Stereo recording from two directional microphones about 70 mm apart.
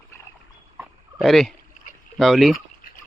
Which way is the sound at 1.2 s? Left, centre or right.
Centre.